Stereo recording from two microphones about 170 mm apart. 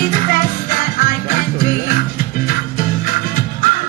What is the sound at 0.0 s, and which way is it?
Music, 55° left (ahead or behind).